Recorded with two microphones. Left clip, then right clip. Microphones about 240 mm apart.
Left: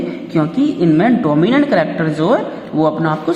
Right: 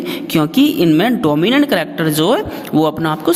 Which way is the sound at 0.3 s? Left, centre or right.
Right.